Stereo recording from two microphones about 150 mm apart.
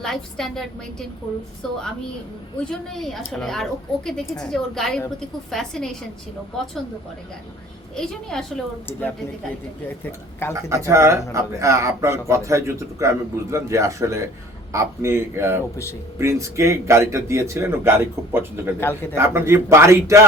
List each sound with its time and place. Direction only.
0.0 s a woman's voice: centre (ahead or behind)
7.9 s a woman's voice: 5° left (ahead or behind)
10.5 s speech: 20° right (ahead or behind)